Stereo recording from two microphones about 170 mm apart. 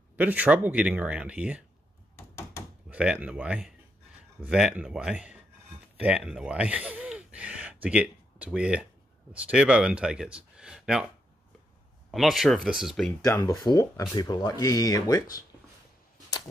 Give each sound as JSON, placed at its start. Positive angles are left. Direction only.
{"t": 0.1, "sound": "speech", "side_deg": -10}
{"t": 2.1, "sound": "door", "side_deg": 20}
{"t": 2.9, "sound": "speech", "side_deg": -5}
{"t": 5.9, "sound": "a sound", "side_deg": -5}
{"t": 9.3, "sound": "speech", "side_deg": -5}
{"t": 12.1, "sound": "speech", "side_deg": 0}
{"t": 13.2, "sound": "speech", "side_deg": 20}